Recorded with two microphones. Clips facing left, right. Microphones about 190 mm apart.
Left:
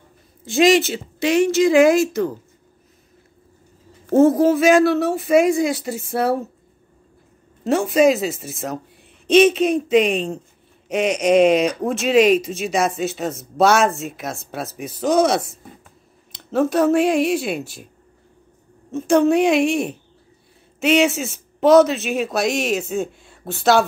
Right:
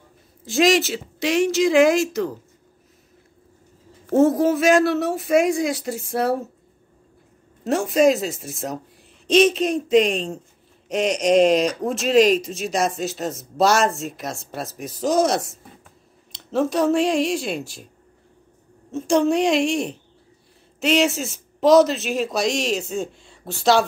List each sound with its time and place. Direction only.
0.5 s speech: centre (ahead or behind)
4.1 s speech: centre (ahead or behind)
7.6 s speech: centre (ahead or behind)
18.9 s speech: centre (ahead or behind)
21.0 s speech: centre (ahead or behind)
22.5 s a woman's voice: 55° left (ahead or behind)